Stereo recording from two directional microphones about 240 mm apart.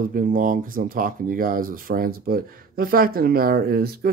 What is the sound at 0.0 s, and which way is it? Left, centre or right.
Speech, right.